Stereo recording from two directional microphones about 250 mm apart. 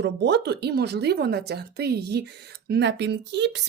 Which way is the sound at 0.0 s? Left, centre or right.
Right.